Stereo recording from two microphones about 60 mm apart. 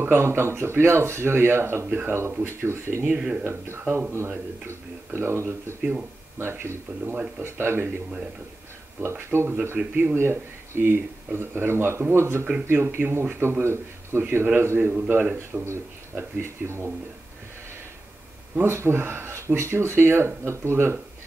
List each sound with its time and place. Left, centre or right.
0.0 s speech: right
1.9 s speech: right
2.4 s speech: right
3.2 s speech: centre
3.4 s speech: right
9.0 s speech: right
14.9 s speech: right
15.6 s speech: right
18.6 s speech: right